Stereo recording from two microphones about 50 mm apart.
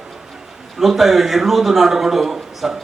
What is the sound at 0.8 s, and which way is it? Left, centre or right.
A man's voice, centre.